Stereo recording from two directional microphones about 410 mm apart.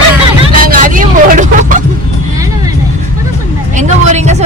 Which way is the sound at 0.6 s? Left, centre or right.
Centre.